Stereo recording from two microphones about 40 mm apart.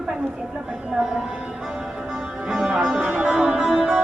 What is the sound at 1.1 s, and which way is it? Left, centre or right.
Music, centre.